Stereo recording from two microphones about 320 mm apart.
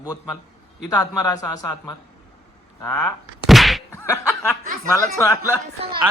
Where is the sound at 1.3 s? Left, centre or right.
Centre.